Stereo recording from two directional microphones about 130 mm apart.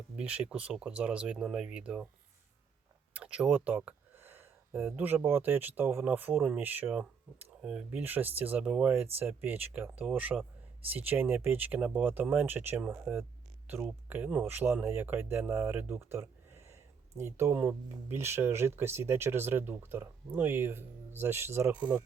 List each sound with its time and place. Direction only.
0.2 s speech: 10° right (ahead or behind)
3.1 s speech: 10° right (ahead or behind)